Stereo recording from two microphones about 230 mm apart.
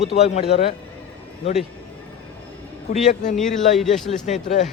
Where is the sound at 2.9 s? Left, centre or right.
Left.